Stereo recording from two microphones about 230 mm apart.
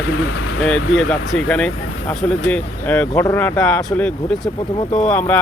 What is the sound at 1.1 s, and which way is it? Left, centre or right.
Speech, centre.